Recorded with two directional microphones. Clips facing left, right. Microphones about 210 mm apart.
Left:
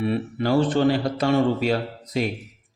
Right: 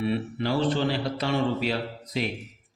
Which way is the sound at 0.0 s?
50° left (ahead or behind).